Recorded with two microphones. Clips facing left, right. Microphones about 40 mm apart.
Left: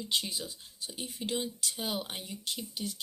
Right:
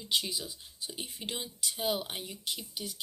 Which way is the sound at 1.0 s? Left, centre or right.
Right.